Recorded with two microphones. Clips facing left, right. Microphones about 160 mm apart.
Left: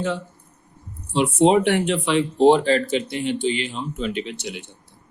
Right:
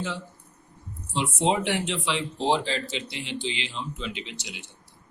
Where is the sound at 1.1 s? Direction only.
60° left (ahead or behind).